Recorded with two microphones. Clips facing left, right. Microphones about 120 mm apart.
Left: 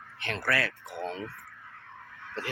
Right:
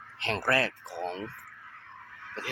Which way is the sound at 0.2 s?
30° right (ahead or behind).